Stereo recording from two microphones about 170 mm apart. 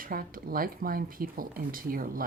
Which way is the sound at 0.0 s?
60° right (ahead or behind).